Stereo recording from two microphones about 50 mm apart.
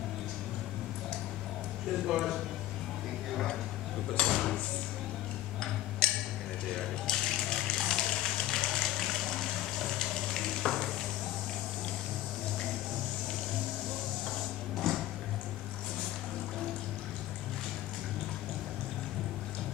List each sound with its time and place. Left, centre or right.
2.0 s speech: centre
4.3 s speech: centre
6.0 s a sound: centre
8.6 s water: centre
14.2 s sewing machine: centre